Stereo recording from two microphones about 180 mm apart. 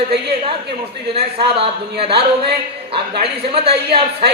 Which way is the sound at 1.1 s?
30° right (ahead or behind).